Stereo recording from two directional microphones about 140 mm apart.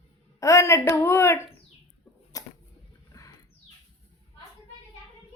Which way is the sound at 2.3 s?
25° left (ahead or behind).